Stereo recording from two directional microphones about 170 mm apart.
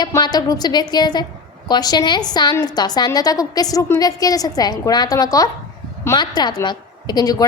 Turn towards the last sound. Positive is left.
turn(degrees=25)  # may be behind; listen again after turning